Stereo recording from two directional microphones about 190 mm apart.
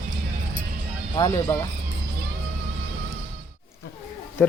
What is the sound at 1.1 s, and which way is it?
Speech, 20° left (ahead or behind).